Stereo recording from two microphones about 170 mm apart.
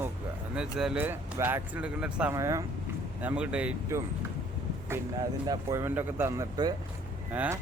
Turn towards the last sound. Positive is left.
turn(degrees=-10)  # may be behind; listen again after turning